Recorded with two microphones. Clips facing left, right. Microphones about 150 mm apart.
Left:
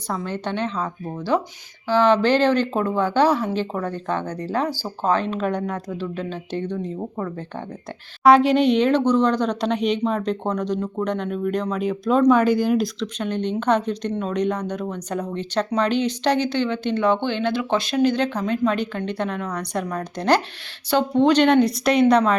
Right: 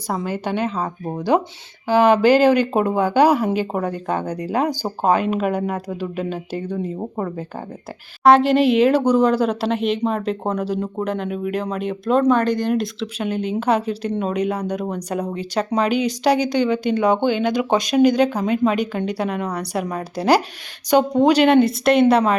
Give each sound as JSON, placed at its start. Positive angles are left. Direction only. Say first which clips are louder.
{"t": 0.1, "sound": "speech", "louder": "right 3 dB", "side_deg": -10}
{"t": 1.9, "sound": "speech", "louder": "right 3 dB", "side_deg": -10}
{"t": 7.0, "sound": "speech", "louder": "right 3 dB", "side_deg": -20}
{"t": 8.2, "sound": "speech", "louder": "right 1 dB", "side_deg": 0}